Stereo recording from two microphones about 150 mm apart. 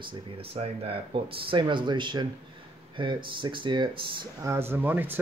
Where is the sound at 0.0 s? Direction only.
40° right (ahead or behind).